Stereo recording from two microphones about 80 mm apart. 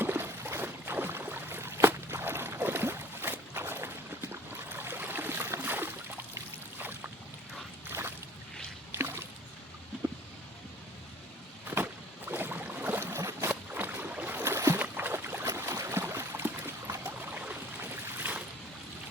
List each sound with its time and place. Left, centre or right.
0.0 s boat: right
7.9 s squish: right
9.0 s a sound: right
11.7 s boat: right
13.5 s boat: right
15.5 s boat: right
16.0 s a sound: right
17.1 s boat: centre